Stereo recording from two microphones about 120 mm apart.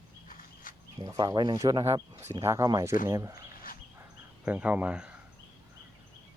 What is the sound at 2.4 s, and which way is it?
Speech, 25° right (ahead or behind).